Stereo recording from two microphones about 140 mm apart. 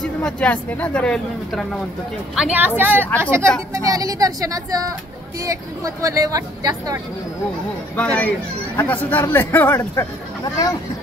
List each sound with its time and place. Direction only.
0.0 s speech: 10° left (ahead or behind)
2.3 s a woman's voice: 10° right (ahead or behind); by 7.0 s 25° right (ahead or behind)
7.9 s speech: 10° left (ahead or behind)